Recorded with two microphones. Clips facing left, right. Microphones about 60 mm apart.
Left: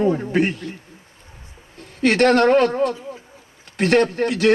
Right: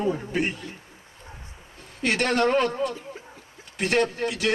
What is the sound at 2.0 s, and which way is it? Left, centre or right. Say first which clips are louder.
A man's voice: left 8 dB; left.